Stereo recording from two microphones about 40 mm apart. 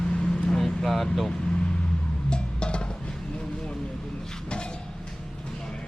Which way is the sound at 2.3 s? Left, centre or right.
Left.